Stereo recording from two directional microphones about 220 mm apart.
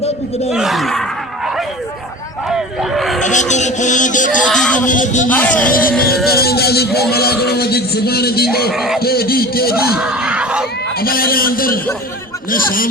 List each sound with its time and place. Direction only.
0.0 s a sound: 30° left (ahead or behind)
0.5 s speech: centre (ahead or behind)
2.5 s a sound: centre (ahead or behind)
3.2 s a man's voice: 35° left (ahead or behind)
4.4 s speech: 5° left (ahead or behind)
4.9 s a man's voice: 35° left (ahead or behind)
5.3 s speech: 5° left (ahead or behind)
6.2 s a man's voice: 45° left (ahead or behind)
8.7 s speech: centre (ahead or behind)
9.0 s a man's voice: 45° left (ahead or behind)
10.0 s a sound: 5° right (ahead or behind)
11.0 s a man's voice: 40° left (ahead or behind)